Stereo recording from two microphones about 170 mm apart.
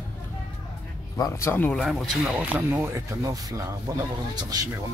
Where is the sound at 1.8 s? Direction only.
5° right (ahead or behind).